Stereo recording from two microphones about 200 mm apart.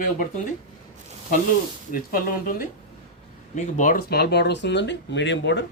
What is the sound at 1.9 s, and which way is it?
Speech, 45° left (ahead or behind).